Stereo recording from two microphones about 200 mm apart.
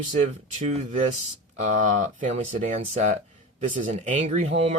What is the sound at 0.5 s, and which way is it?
Speech, 35° right (ahead or behind).